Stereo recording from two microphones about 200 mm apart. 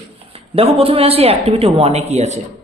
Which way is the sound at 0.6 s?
30° right (ahead or behind).